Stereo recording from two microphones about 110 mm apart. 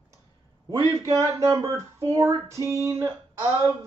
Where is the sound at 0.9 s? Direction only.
25° right (ahead or behind).